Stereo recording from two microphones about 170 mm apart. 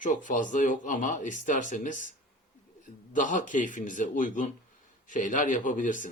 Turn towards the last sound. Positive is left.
turn(degrees=50)  # may be behind; listen again after turning